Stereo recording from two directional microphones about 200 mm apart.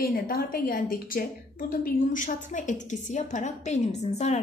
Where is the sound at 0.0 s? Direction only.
50° left (ahead or behind).